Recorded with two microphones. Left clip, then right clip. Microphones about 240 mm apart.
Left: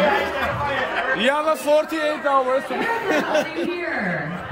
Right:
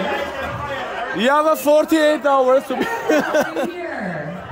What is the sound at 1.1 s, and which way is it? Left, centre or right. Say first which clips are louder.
A man's voice: right 7 dB; right.